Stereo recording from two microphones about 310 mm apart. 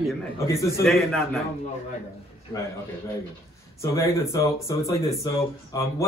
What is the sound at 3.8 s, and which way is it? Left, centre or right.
Speech, centre.